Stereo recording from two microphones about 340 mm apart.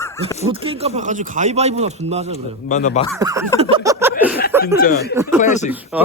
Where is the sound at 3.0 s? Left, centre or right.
Centre.